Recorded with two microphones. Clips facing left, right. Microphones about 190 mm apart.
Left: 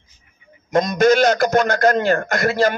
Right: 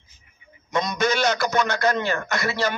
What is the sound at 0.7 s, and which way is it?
A man's voice, 45° left (ahead or behind).